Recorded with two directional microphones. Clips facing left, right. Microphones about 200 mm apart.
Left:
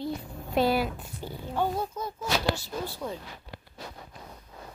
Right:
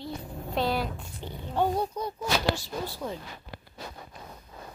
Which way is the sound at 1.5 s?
15° right (ahead or behind).